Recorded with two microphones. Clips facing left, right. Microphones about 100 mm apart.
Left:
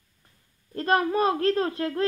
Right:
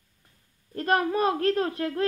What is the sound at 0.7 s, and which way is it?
A woman's voice, 30° left (ahead or behind).